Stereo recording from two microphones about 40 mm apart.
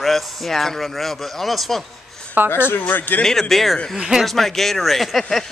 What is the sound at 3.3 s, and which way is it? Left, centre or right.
Speech, centre.